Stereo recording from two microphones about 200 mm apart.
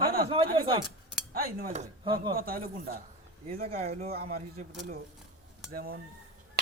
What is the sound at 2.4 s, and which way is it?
Speech, 45° right (ahead or behind).